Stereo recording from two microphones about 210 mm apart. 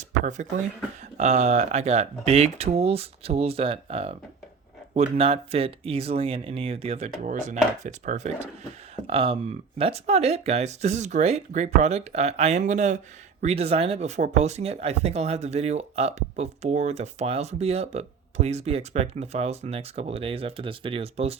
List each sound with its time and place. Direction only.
1.1 s speech: 35° right (ahead or behind)